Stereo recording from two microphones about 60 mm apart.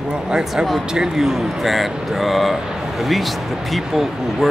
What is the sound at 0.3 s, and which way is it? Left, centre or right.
Speech, centre.